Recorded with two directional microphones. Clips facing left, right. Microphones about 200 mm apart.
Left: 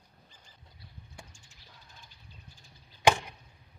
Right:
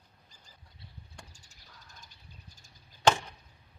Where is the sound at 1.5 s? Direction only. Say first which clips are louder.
Even; 40° right (ahead or behind).